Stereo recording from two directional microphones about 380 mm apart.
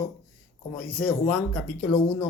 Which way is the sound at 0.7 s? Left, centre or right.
Centre.